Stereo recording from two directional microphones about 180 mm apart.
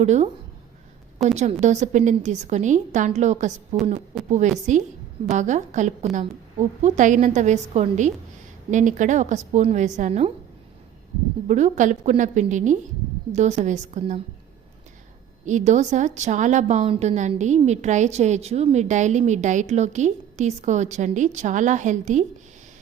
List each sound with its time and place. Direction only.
0.0 s a woman's voice: 40° right (ahead or behind)
1.4 s a woman's voice: 40° right (ahead or behind)
11.4 s a woman's voice: 40° right (ahead or behind)
15.4 s a woman's voice: 40° right (ahead or behind)